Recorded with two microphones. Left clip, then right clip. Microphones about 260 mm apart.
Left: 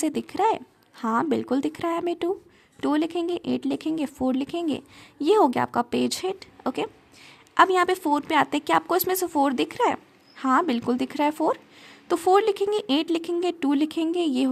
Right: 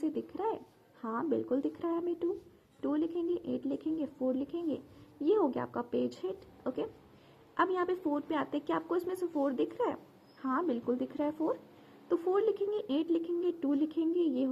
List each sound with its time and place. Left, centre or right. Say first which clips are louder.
0.1 s speech: left 12 dB; left